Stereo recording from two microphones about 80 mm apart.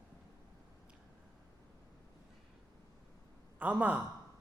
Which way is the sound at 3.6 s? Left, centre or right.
Centre.